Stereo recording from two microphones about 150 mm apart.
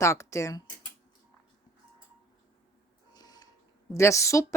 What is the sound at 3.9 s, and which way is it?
Speech, 20° left (ahead or behind).